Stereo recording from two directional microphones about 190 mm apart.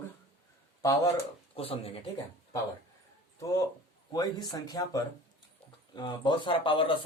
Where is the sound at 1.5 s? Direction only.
30° left (ahead or behind).